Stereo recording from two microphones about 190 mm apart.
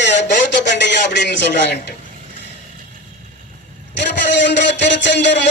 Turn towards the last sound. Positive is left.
turn(degrees=65)  # may be behind; listen again after turning